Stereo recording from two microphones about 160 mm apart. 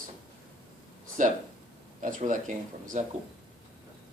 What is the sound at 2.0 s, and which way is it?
Speech, 55° right (ahead or behind).